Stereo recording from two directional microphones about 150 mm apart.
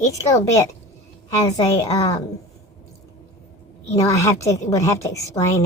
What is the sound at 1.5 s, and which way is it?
Speech, 25° left (ahead or behind).